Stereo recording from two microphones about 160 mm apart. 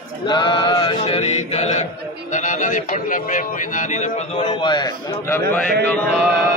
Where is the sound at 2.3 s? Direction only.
50° left (ahead or behind).